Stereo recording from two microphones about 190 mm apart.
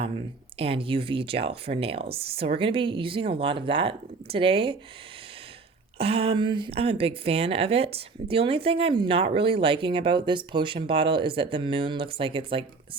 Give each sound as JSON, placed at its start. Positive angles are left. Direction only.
{"t": 0.6, "sound": "a woman's voice", "side_deg": -30}
{"t": 6.0, "sound": "a woman's voice", "side_deg": -30}